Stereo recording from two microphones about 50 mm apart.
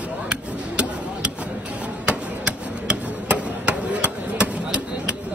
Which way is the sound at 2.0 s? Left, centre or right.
Right.